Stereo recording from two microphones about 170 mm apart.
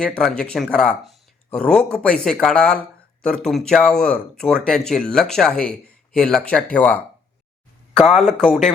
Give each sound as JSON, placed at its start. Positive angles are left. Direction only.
{"t": 0.0, "sound": "speech", "side_deg": 5}